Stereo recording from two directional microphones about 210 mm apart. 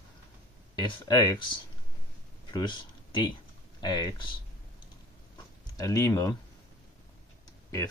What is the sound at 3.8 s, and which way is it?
Speech, 20° left (ahead or behind).